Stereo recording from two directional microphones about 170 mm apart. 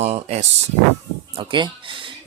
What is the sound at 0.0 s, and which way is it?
Speech, 40° right (ahead or behind).